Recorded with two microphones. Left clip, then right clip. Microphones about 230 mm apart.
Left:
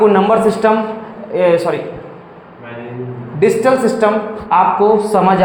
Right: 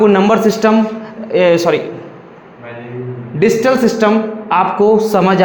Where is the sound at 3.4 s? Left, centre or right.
Right.